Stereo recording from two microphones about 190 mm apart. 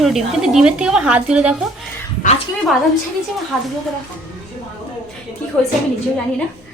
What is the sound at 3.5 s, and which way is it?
Speech, centre (ahead or behind).